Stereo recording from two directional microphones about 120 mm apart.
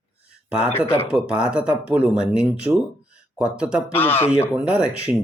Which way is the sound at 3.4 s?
10° right (ahead or behind).